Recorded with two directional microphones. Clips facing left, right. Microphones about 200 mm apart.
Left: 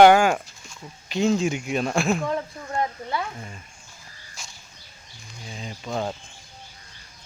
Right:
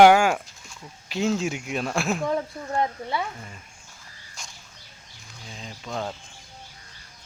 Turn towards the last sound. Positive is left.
turn(degrees=5)  # may be behind; listen again after turning